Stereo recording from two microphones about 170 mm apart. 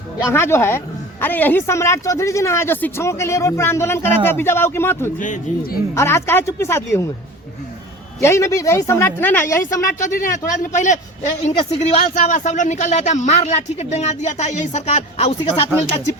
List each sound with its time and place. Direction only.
0.3 s speech: 15° left (ahead or behind)
5.2 s speech: 50° left (ahead or behind)
5.9 s speech: 15° left (ahead or behind)
8.2 s speech: 15° left (ahead or behind)
10.1 s speech: 50° left (ahead or behind)